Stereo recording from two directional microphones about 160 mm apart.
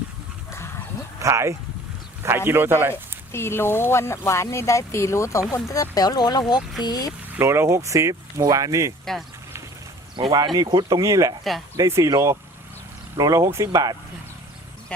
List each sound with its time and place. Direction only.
1.2 s a man's voice: 15° right (ahead or behind)
2.9 s speech: 15° left (ahead or behind)
7.3 s speech: 15° right (ahead or behind)
10.2 s speech: 30° right (ahead or behind)